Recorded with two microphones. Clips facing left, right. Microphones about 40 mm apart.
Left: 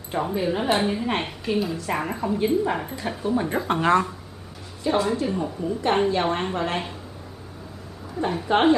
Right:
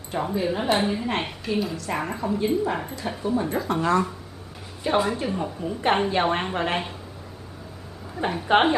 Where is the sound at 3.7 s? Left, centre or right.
Left.